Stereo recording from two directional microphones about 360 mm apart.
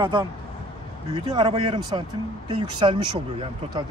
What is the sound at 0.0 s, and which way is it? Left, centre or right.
Speech, centre.